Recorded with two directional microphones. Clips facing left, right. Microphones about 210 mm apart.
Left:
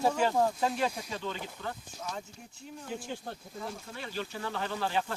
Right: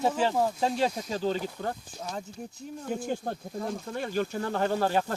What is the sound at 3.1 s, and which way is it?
Speech, 45° right (ahead or behind).